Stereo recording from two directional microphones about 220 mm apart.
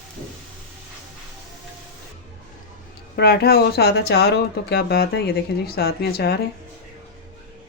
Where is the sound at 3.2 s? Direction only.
45° left (ahead or behind).